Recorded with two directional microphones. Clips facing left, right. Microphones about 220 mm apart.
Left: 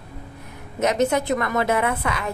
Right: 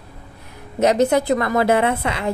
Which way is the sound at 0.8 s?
35° right (ahead or behind).